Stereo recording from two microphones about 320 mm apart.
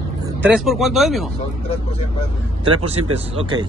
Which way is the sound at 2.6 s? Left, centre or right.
Centre.